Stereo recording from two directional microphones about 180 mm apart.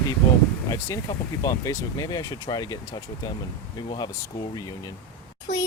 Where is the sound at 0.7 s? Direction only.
15° left (ahead or behind).